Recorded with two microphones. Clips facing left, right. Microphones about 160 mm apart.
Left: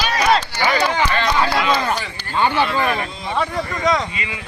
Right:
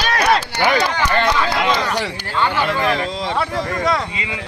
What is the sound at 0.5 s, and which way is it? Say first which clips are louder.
Speech: right 3 dB; 65° right (ahead or behind).